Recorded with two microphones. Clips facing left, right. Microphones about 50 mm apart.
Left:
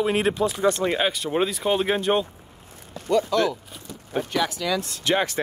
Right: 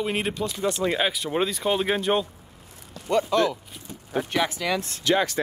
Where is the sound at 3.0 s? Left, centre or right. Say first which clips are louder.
Left 1 dB; right.